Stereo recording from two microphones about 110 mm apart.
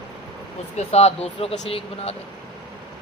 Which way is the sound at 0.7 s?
75° left (ahead or behind).